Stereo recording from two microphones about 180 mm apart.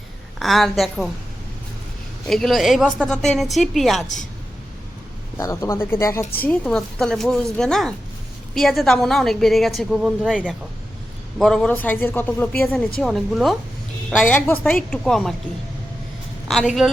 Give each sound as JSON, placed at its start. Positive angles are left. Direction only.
{"t": 0.3, "sound": "a woman's voice", "side_deg": 0}
{"t": 2.2, "sound": "a woman's voice", "side_deg": 0}
{"t": 5.4, "sound": "a man's voice", "side_deg": 20}
{"t": 6.4, "sound": "a woman's voice", "side_deg": 5}